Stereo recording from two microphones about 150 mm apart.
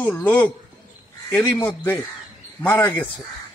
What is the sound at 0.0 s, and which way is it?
Speech, 10° left (ahead or behind).